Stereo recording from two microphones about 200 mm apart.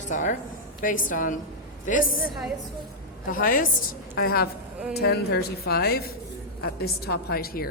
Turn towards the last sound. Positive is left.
turn(degrees=50)  # may be behind; listen again after turning